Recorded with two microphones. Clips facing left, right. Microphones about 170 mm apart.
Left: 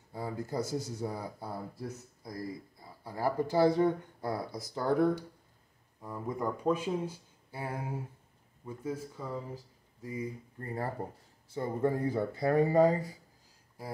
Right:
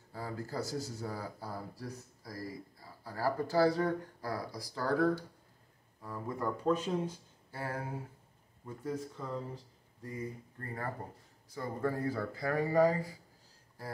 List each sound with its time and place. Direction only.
0.1 s speech: 15° left (ahead or behind)
10.6 s speech: 25° left (ahead or behind)